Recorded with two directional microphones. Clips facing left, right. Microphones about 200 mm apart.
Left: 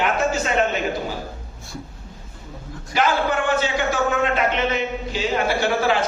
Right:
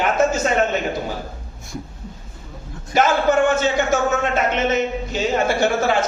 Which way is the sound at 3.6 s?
45° right (ahead or behind).